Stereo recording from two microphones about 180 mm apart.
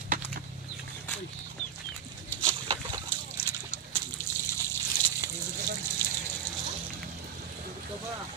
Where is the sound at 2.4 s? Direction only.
25° right (ahead or behind).